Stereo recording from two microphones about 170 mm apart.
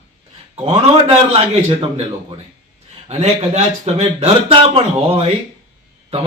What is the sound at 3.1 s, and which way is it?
A man's voice, 40° right (ahead or behind).